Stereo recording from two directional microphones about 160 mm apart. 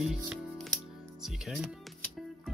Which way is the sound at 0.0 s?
Centre (ahead or behind).